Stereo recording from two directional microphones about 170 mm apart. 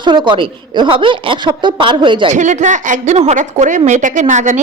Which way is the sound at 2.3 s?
45° right (ahead or behind).